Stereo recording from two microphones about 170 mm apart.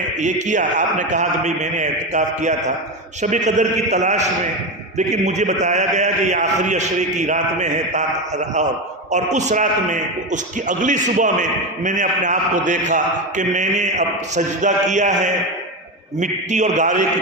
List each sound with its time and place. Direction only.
0.2 s a man's voice: 45° right (ahead or behind)